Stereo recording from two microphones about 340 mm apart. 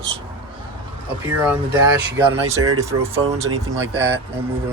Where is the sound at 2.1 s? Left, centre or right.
Centre.